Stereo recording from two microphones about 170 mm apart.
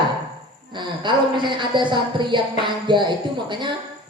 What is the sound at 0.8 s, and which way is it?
Speech, 30° right (ahead or behind).